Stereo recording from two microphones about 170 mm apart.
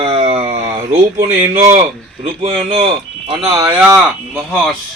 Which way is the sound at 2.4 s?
35° right (ahead or behind).